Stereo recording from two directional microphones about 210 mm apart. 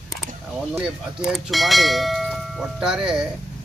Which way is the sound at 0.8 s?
Centre (ahead or behind).